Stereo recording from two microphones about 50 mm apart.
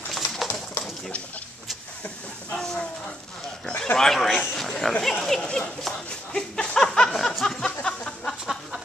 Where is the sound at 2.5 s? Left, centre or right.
Centre.